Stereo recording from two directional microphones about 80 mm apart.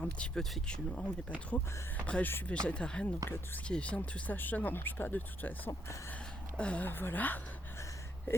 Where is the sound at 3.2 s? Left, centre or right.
Left.